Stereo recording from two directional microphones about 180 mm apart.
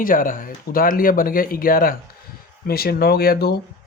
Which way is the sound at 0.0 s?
50° left (ahead or behind).